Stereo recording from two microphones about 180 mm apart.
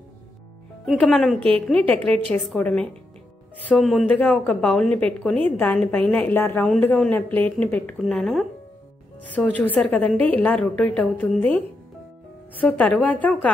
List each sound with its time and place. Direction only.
0.9 s a woman's voice: 5° left (ahead or behind)
12.5 s a woman's voice: 10° left (ahead or behind)